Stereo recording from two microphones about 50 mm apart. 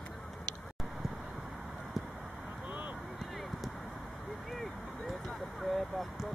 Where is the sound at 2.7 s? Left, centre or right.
Right.